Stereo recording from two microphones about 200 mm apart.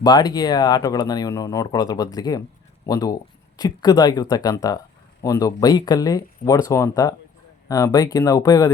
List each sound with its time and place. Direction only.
0.0 s speech: 20° left (ahead or behind)